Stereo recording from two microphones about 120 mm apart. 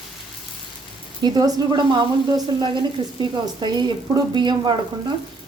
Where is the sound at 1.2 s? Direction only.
35° right (ahead or behind).